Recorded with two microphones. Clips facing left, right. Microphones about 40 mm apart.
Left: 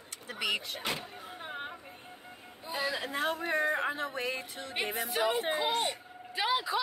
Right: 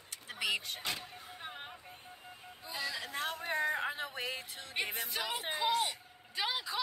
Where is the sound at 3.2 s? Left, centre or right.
Centre.